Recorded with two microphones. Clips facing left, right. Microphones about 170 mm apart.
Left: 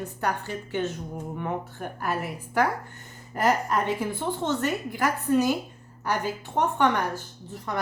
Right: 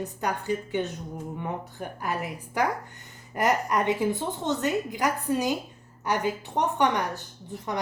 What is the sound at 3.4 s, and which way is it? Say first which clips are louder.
A woman's voice: even; 15° right (ahead or behind).